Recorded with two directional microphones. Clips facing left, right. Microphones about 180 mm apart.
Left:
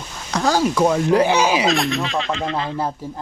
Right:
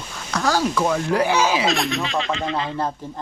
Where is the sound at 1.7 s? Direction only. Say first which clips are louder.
Left 2 dB; centre (ahead or behind).